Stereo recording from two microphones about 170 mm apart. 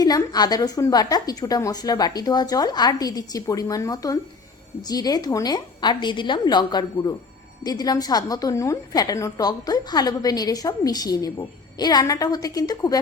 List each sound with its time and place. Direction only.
0.0 s a woman's voice: 25° left (ahead or behind)